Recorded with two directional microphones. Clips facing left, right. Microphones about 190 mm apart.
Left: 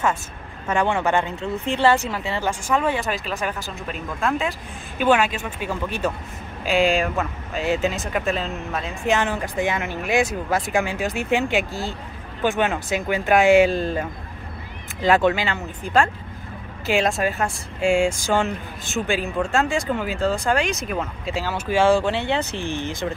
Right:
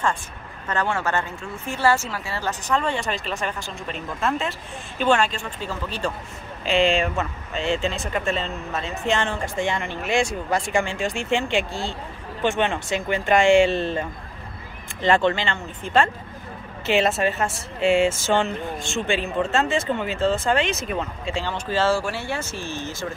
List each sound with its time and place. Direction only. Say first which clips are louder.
0.7 s a woman's voice: left 4 dB; 15° left (ahead or behind)
2.7 s speech: left 2 dB; 5° left (ahead or behind)